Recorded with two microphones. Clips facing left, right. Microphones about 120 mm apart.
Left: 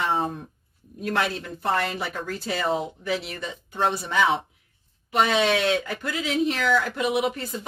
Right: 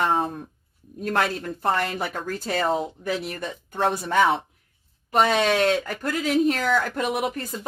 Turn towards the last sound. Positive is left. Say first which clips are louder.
# left 1 dB
turn(degrees=-45)  # may be behind; listen again after turning